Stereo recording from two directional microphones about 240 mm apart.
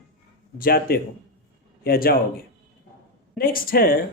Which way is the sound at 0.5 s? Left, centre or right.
Left.